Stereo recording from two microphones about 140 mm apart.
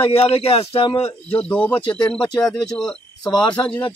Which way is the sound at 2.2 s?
30° left (ahead or behind).